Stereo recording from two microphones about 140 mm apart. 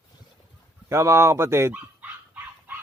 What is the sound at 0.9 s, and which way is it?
Speech, 20° right (ahead or behind).